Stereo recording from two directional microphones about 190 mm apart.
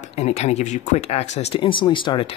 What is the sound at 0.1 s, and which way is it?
Speech, 35° left (ahead or behind).